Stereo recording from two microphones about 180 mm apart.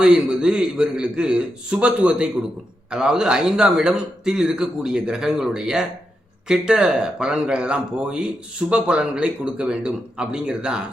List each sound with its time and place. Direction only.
0.0 s a man's voice: 5° right (ahead or behind)